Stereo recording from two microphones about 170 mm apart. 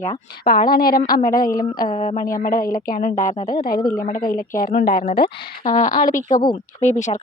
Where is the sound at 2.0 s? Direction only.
45° left (ahead or behind).